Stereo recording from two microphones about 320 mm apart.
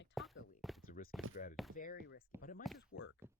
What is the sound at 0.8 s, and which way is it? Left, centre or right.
Speech, left.